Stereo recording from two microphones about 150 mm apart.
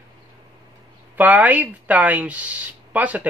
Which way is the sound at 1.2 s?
10° right (ahead or behind).